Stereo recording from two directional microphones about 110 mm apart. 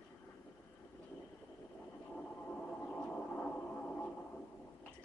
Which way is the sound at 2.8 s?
15° left (ahead or behind).